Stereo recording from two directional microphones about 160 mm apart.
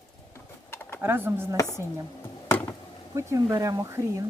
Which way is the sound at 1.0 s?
15° right (ahead or behind).